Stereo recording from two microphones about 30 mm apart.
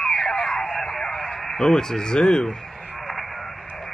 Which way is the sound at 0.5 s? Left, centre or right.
Centre.